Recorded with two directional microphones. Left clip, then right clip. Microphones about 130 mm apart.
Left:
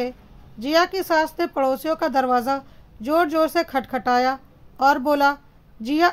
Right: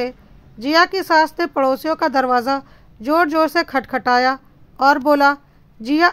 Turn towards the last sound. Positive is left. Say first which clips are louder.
# right 4 dB
turn(degrees=-25)  # may be behind; listen again after turning